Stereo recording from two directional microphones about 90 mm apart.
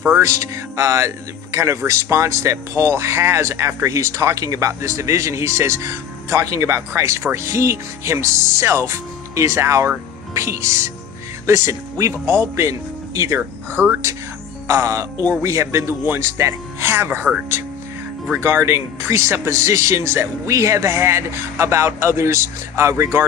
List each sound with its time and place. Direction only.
0.4 s speech: 35° right (ahead or behind)
13.4 s speech: 20° right (ahead or behind)
14.7 s speech: 35° right (ahead or behind)
18.3 s speech: 30° right (ahead or behind)